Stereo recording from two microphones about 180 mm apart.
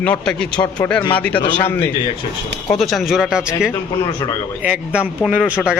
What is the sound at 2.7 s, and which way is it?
A man's voice, centre (ahead or behind).